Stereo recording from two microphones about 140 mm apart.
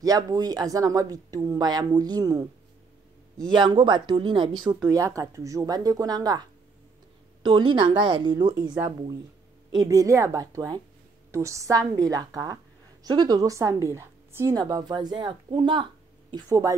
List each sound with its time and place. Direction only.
0.0 s a woman's voice: 25° right (ahead or behind)
3.5 s a woman's voice: 35° right (ahead or behind)
7.4 s a woman's voice: 35° right (ahead or behind)